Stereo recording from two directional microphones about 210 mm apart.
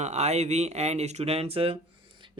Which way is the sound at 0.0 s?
30° right (ahead or behind).